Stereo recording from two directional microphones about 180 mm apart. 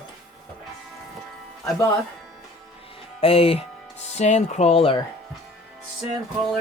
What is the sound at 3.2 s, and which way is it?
Speech, 30° left (ahead or behind).